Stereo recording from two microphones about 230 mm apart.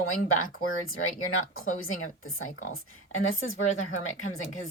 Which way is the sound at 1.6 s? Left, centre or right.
Left.